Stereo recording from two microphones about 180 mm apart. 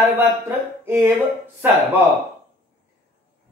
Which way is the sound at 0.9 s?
10° right (ahead or behind).